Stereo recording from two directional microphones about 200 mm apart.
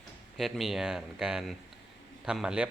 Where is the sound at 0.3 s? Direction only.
Centre (ahead or behind).